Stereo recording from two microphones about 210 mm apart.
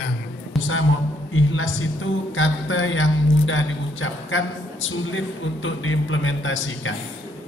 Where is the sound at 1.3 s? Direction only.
70° left (ahead or behind).